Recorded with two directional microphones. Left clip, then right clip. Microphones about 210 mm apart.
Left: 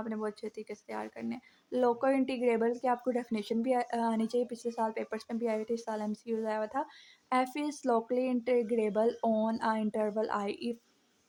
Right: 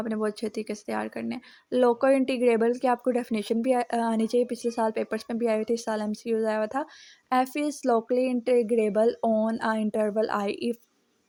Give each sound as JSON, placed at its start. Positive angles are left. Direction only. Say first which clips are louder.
{"t": 0.0, "sound": "speech", "louder": "right 8 dB", "side_deg": -25}